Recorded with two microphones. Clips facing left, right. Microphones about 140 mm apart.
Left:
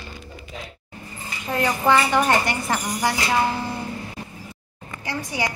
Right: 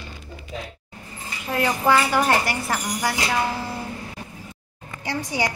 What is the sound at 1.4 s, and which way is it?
Cutlery, 5° right (ahead or behind).